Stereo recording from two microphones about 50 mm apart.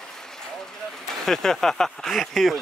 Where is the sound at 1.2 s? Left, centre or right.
Centre.